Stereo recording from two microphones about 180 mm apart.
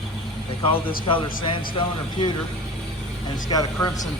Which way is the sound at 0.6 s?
30° left (ahead or behind).